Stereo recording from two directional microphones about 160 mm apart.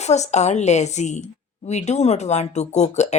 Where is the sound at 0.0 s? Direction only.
45° left (ahead or behind).